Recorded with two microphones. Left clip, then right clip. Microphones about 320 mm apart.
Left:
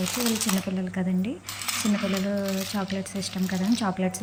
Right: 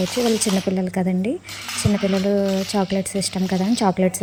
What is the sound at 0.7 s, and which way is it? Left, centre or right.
Speech, centre.